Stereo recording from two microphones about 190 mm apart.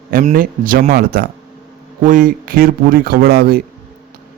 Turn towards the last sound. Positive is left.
turn(degrees=-55)  # may be behind; listen again after turning